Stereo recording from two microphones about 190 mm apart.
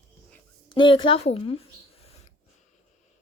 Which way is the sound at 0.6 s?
25° left (ahead or behind).